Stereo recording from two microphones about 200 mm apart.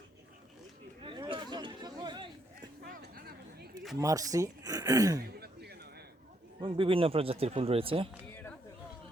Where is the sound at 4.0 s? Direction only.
15° right (ahead or behind).